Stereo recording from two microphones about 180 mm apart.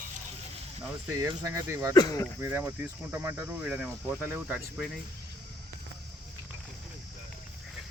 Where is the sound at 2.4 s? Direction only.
10° right (ahead or behind).